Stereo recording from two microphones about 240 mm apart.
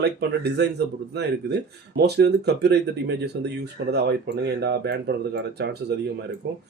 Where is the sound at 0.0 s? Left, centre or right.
Right.